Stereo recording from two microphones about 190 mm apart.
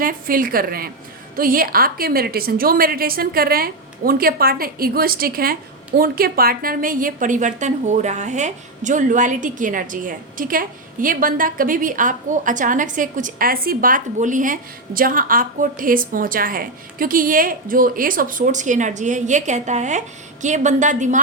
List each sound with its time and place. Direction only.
0.0 s a woman's voice: 50° right (ahead or behind)